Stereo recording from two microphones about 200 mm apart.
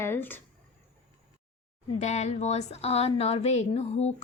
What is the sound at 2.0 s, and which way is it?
Speech, 35° left (ahead or behind).